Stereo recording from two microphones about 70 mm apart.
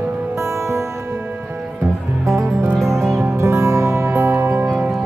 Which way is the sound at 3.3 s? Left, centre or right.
Right.